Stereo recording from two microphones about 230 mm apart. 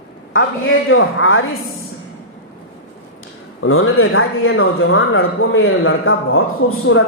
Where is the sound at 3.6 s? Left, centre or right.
Left.